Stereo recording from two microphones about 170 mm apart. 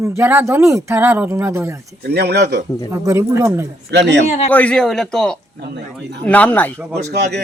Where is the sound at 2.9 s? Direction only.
15° right (ahead or behind).